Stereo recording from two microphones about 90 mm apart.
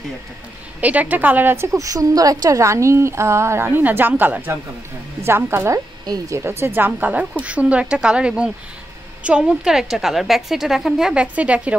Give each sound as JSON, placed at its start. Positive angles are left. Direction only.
{"t": 0.7, "sound": "a woman's voice", "side_deg": -15}
{"t": 1.7, "sound": "a woman's voice", "side_deg": -40}
{"t": 6.0, "sound": "speech", "side_deg": -45}
{"t": 6.3, "sound": "a woman's voice", "side_deg": -25}